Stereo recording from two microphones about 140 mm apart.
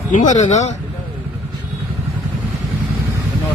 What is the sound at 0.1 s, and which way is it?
Speech, 60° left (ahead or behind).